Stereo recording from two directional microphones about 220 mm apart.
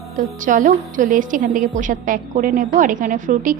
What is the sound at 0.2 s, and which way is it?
A woman's voice, 35° right (ahead or behind).